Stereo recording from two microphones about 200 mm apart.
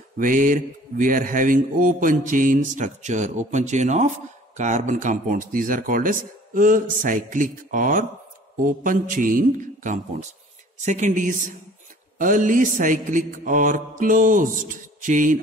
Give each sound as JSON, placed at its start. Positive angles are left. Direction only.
{"t": 0.2, "sound": "speech", "side_deg": -40}
{"t": 8.6, "sound": "mantra", "side_deg": -40}
{"t": 10.9, "sound": "speech", "side_deg": -40}